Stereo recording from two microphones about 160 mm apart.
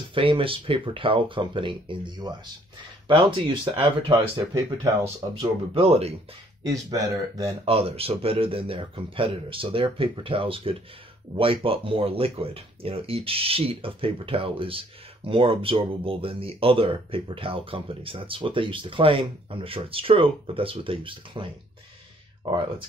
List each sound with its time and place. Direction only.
0.1 s speech: 35° right (ahead or behind)
5.3 s speech: 35° right (ahead or behind)
6.6 s speech: 20° right (ahead or behind)
7.6 s speech: 40° right (ahead or behind)